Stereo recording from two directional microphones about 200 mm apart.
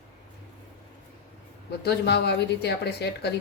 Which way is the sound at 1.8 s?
55° left (ahead or behind).